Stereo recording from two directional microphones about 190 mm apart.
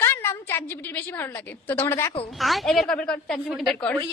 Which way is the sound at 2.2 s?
Centre (ahead or behind).